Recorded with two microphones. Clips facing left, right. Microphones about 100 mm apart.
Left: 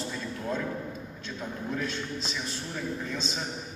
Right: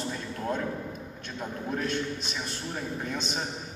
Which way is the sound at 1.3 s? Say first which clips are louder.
Right 1 dB; 55° right (ahead or behind).